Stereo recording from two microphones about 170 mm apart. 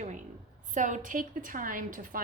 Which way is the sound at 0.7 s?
45° right (ahead or behind).